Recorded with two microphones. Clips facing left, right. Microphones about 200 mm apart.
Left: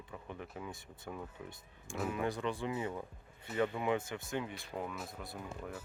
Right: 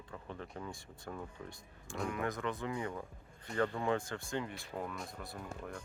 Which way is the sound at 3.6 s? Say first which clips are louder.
Even; 15° left (ahead or behind).